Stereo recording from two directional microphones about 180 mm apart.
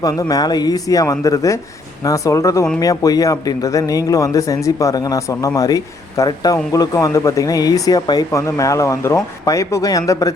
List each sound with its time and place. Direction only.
0.0 s speech: 20° left (ahead or behind)